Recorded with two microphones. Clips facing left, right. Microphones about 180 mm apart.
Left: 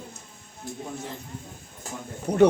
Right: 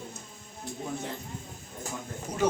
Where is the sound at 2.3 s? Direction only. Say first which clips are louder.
Left 14 dB; 65° left (ahead or behind).